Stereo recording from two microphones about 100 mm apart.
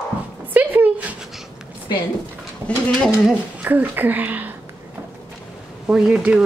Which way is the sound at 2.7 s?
10° left (ahead or behind).